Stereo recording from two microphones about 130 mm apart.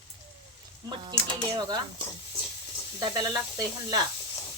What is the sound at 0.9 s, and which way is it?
Sizzle, 35° right (ahead or behind).